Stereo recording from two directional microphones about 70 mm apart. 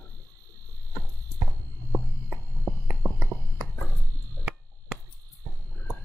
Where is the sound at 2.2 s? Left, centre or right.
Right.